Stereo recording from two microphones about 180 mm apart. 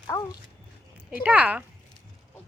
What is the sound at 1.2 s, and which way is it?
Speech, 10° right (ahead or behind).